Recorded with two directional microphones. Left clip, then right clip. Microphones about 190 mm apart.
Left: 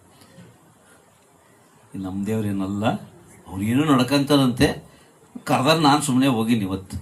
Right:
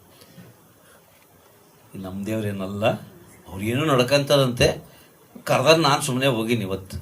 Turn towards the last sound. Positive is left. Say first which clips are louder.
# left 1 dB
turn(degrees=-35)  # may be behind; listen again after turning